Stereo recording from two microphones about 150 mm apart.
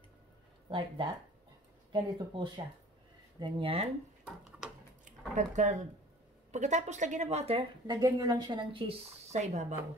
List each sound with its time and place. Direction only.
0.7 s a woman's voice: 35° right (ahead or behind)
4.2 s a sound: 5° right (ahead or behind)
5.3 s a woman's voice: 55° right (ahead or behind)
7.8 s a woman's voice: 25° right (ahead or behind); by 9.8 s 50° right (ahead or behind)